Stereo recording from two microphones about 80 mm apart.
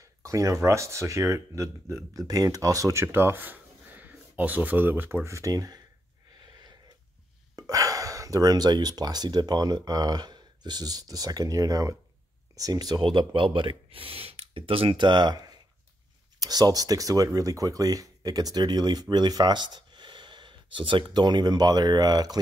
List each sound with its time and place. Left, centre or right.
0.0 s speech: right
5.3 s speech: right
7.5 s speech: right
14.9 s speech: right